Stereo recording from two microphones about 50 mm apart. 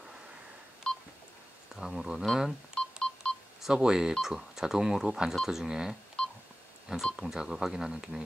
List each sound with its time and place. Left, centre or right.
0.8 s telephone dialing: centre
1.8 s speech: centre
2.7 s telephone dialing: centre
3.6 s speech: centre
6.2 s telephone dialing: centre
7.2 s speech: centre